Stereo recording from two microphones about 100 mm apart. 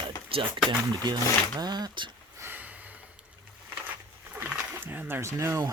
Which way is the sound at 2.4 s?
20° right (ahead or behind).